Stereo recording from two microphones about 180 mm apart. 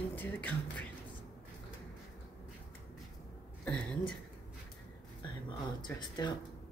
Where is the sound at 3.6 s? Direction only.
5° left (ahead or behind).